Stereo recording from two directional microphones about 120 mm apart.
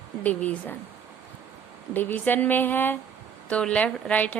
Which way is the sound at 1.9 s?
15° left (ahead or behind).